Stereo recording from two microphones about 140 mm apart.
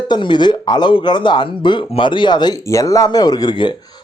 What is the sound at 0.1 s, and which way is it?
Speech, 35° left (ahead or behind).